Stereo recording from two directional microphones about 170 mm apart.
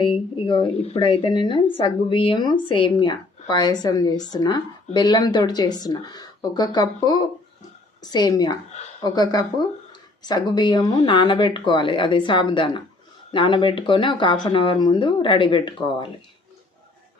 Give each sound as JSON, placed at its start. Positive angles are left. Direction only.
{"t": 0.0, "sound": "speech", "side_deg": 30}